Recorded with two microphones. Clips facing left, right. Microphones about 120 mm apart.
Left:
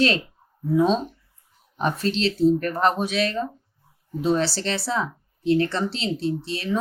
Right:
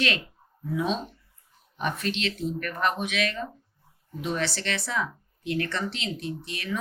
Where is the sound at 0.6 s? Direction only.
35° left (ahead or behind).